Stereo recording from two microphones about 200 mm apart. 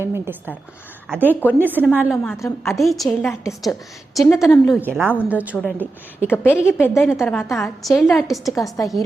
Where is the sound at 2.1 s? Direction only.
10° left (ahead or behind).